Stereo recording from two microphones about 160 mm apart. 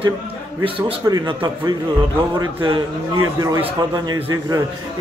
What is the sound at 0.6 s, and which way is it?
A man's voice, 30° right (ahead or behind).